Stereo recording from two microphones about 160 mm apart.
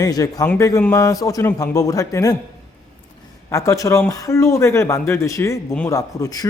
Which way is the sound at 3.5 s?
20° left (ahead or behind).